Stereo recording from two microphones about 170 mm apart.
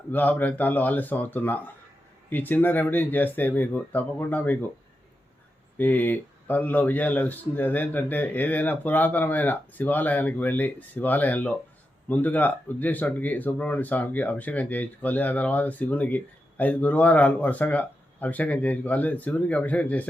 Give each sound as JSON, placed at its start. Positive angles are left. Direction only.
{"t": 0.1, "sound": "speech", "side_deg": 10}
{"t": 5.7, "sound": "speech", "side_deg": 10}